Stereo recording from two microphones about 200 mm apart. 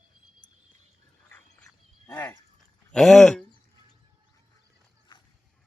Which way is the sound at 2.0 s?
10° left (ahead or behind).